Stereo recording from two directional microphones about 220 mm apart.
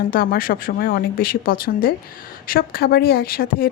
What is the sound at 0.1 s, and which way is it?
A woman's voice, 40° left (ahead or behind).